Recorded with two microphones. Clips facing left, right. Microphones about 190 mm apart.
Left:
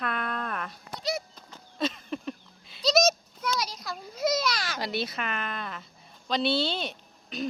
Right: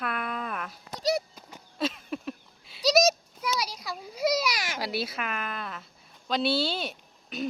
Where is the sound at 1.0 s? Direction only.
40° right (ahead or behind).